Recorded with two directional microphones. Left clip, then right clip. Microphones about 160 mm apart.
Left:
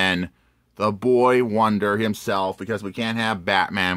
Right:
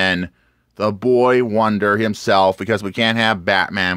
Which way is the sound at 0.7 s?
20° right (ahead or behind).